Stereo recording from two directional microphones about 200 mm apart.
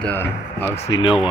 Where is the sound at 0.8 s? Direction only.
20° left (ahead or behind).